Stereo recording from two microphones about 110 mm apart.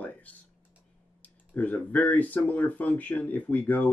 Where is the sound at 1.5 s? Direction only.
15° left (ahead or behind).